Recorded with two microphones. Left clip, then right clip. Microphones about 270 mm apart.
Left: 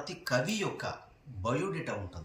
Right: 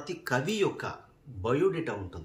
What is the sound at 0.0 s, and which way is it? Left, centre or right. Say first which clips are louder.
Speech: right 1 dB; centre.